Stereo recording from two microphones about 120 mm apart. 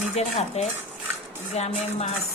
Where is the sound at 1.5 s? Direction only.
65° left (ahead or behind).